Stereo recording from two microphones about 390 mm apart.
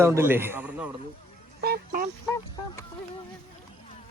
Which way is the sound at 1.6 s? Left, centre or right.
Right.